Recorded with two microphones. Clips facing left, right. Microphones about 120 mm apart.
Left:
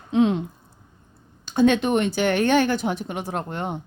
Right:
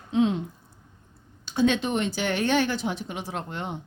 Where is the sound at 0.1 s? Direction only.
65° left (ahead or behind).